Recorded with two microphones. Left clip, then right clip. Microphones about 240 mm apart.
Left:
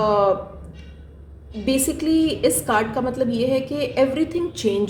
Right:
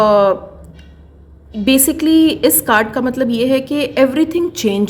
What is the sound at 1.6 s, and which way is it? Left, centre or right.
A woman's voice, right.